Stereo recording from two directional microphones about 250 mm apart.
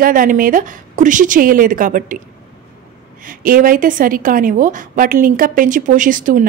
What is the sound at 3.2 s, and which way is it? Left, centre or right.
A woman's voice, right.